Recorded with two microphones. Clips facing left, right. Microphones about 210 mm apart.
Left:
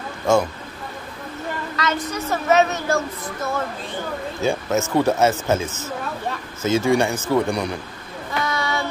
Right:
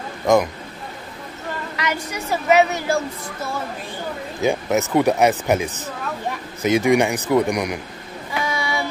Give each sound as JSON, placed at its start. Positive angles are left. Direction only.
{"t": 0.3, "sound": "speech", "side_deg": -15}
{"t": 1.8, "sound": "speech", "side_deg": -10}
{"t": 4.4, "sound": "speech", "side_deg": -15}
{"t": 8.3, "sound": "child singing", "side_deg": -10}